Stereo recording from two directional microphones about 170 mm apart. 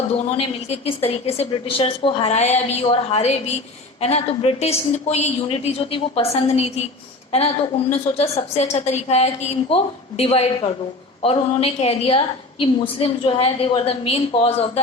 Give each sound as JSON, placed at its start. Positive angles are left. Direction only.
{"t": 0.1, "sound": "a woman's voice", "side_deg": 35}